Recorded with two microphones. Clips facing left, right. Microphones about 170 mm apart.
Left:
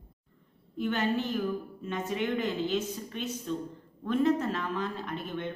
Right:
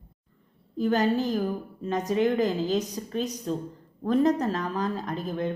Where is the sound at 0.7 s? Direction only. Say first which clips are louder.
Right 5 dB; 40° right (ahead or behind).